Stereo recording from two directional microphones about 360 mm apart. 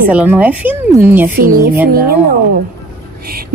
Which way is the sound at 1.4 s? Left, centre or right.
Right.